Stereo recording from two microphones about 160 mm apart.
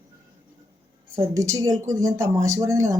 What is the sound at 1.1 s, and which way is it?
Speech, 20° right (ahead or behind).